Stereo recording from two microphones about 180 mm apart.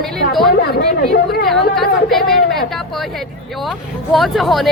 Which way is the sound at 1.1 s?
60° left (ahead or behind).